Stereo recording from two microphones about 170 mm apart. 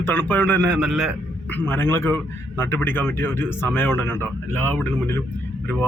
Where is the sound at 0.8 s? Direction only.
5° right (ahead or behind).